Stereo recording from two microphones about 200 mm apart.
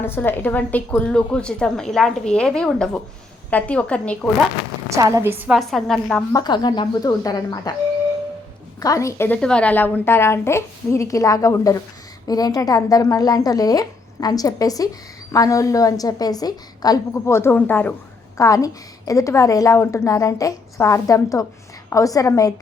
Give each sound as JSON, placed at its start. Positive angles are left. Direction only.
{"t": 0.0, "sound": "a woman's voice", "side_deg": 10}
{"t": 4.9, "sound": "a woman's voice", "side_deg": -15}
{"t": 5.5, "sound": "a woman's voice", "side_deg": 0}
{"t": 6.3, "sound": "a woman's voice", "side_deg": 20}
{"t": 8.8, "sound": "a woman's voice", "side_deg": 15}